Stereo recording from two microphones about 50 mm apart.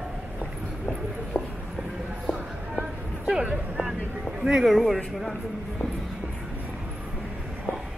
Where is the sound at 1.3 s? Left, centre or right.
Left.